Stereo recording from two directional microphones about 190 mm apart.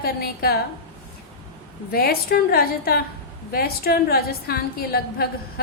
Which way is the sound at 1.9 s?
50° left (ahead or behind).